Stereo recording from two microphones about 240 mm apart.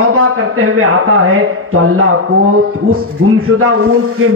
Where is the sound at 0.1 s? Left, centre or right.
Right.